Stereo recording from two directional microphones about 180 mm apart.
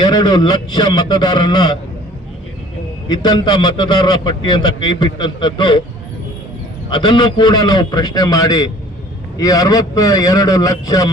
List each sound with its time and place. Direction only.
0.0 s a man's voice: 20° left (ahead or behind)
3.1 s a man's voice: 25° left (ahead or behind)
6.9 s a man's voice: 25° left (ahead or behind)